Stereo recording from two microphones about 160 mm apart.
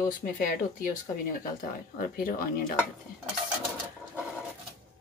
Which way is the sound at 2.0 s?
65° left (ahead or behind).